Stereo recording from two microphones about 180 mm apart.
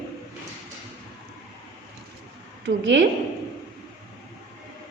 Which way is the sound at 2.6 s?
85° right.